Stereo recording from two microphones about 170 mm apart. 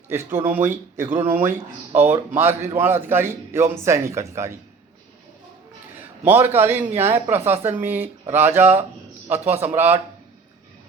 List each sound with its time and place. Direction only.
0.1 s a man's voice: 15° right (ahead or behind)
6.2 s a man's voice: 10° right (ahead or behind)